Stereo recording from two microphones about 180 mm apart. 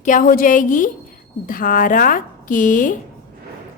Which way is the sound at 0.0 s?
45° left (ahead or behind).